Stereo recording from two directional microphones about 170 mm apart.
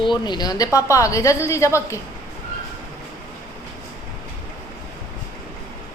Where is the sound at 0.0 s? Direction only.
25° left (ahead or behind).